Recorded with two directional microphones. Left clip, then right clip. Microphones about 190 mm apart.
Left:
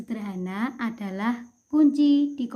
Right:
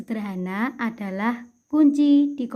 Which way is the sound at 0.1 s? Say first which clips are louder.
Right 4 dB; 40° right (ahead or behind).